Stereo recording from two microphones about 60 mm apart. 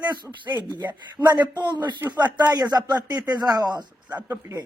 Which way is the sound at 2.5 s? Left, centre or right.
Right.